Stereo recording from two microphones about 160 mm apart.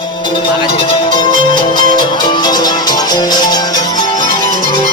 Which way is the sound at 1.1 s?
30° left (ahead or behind).